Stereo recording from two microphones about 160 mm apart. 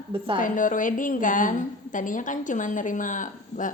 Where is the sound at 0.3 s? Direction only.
55° left (ahead or behind).